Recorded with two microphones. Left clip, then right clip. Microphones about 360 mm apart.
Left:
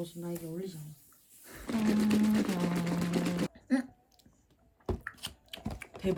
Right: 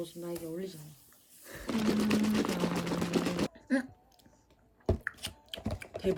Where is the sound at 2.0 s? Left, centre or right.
Centre.